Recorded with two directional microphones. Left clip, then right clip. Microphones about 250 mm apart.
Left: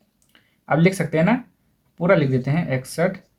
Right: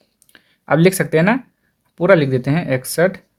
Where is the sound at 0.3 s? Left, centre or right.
Right.